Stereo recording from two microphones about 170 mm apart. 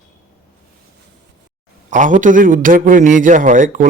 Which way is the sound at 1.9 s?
50° right (ahead or behind).